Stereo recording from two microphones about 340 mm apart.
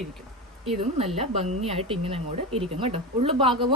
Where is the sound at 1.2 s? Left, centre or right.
Centre.